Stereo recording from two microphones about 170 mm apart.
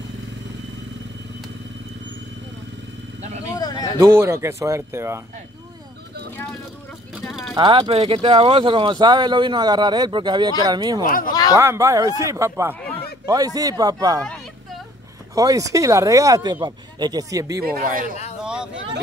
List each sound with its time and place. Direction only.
3.5 s a sound: 20° left (ahead or behind)
4.0 s speech: 15° right (ahead or behind)
6.3 s vehicle: 10° left (ahead or behind)
7.2 s vehicle: centre (ahead or behind)
7.5 s speech: 25° right (ahead or behind)
14.2 s a sound: 5° left (ahead or behind)
15.3 s speech: 20° right (ahead or behind)
17.6 s speech: 60° right (ahead or behind)
18.4 s vehicle: 5° right (ahead or behind)